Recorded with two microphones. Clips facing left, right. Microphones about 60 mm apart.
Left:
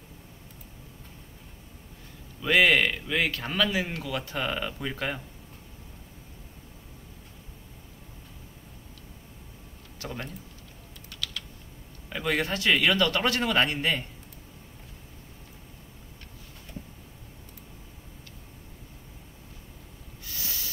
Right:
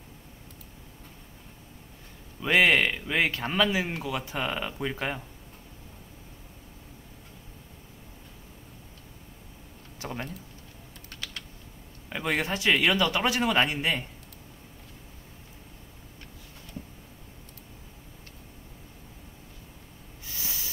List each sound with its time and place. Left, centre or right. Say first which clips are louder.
2.4 s a man's voice: even; centre
9.9 s speech: right 1 dB; centre
11.1 s typing: left 3 dB; right
12.1 s a man's voice: left 1 dB; centre
20.2 s snort: even; centre